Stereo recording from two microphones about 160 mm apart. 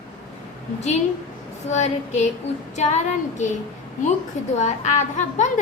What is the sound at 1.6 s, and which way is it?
A woman's voice, 45° left (ahead or behind).